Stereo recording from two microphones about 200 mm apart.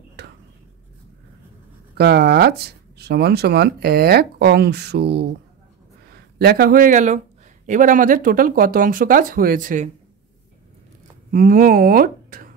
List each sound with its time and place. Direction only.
0.2 s a sound: 55° right (ahead or behind)
2.0 s speech: 55° right (ahead or behind)
11.3 s speech: 45° right (ahead or behind)